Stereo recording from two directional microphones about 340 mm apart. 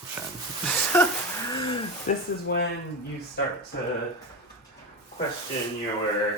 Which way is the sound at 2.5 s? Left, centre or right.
Left.